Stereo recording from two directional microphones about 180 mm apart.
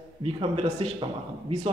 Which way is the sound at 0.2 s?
30° right (ahead or behind).